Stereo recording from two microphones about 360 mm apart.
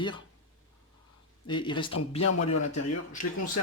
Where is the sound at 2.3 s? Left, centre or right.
Left.